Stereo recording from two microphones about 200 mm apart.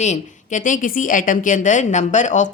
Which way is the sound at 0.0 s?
35° left (ahead or behind).